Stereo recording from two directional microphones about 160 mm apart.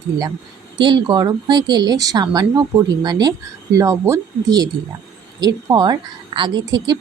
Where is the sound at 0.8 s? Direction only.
30° right (ahead or behind).